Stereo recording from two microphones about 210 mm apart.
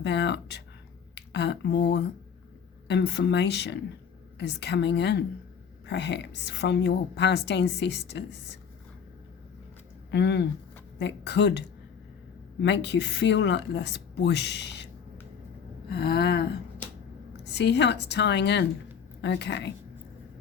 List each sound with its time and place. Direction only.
0.0 s a woman's voice: 55° left (ahead or behind)
10.1 s a woman's voice: 55° left (ahead or behind)
15.9 s gasp: 50° left (ahead or behind)
17.4 s a woman's voice: 55° left (ahead or behind)